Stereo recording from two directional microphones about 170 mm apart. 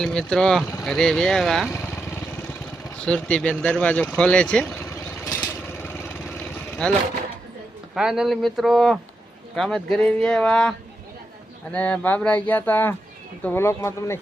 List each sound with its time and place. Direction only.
0.0 s speech: 5° left (ahead or behind)
1.7 s vehicle: 15° left (ahead or behind)
3.0 s speech: 5° left (ahead or behind)
5.2 s vehicle: 20° left (ahead or behind)
6.8 s speech: 5° left (ahead or behind)